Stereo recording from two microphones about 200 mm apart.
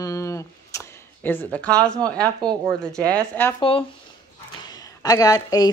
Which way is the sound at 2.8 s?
5° left (ahead or behind).